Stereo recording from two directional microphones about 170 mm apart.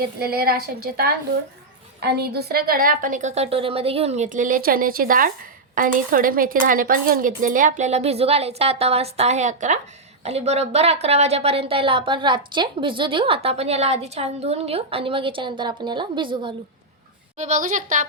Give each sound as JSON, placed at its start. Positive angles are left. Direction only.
{"t": 0.0, "sound": "a woman's voice", "side_deg": -65}
{"t": 17.3, "sound": "speech", "side_deg": -45}